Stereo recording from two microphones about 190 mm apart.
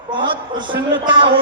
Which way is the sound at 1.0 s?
25° right (ahead or behind).